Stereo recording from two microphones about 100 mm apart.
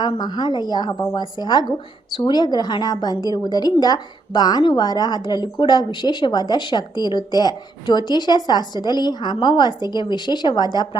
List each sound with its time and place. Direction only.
0.2 s a woman's voice: 45° left (ahead or behind)